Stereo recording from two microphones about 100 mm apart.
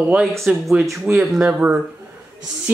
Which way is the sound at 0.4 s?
Centre (ahead or behind).